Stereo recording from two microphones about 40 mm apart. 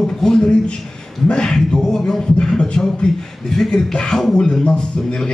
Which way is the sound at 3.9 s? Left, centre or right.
Centre.